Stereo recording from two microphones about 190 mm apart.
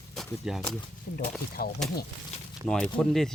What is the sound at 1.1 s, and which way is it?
Speech, 50° left (ahead or behind).